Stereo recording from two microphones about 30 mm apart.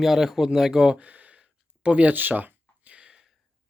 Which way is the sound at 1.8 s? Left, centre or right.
Right.